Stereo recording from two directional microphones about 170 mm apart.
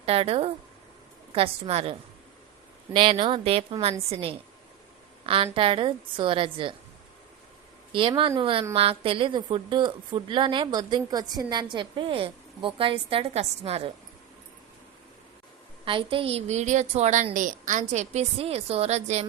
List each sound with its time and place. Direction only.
0.0 s a woman's voice: 35° right (ahead or behind)
7.9 s a woman's voice: 30° right (ahead or behind)
15.8 s a woman's voice: 30° right (ahead or behind)